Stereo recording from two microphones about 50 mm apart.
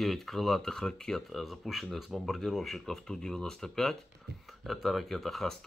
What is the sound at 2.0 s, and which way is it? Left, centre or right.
Speech, centre.